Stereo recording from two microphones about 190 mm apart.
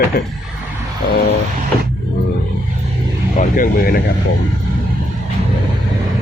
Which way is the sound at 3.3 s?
45° left (ahead or behind).